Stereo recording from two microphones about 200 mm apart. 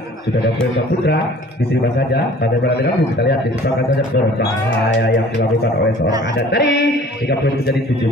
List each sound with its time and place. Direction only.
2.0 s a man's voice: 55° left (ahead or behind)
6.5 s a man's voice: 60° left (ahead or behind)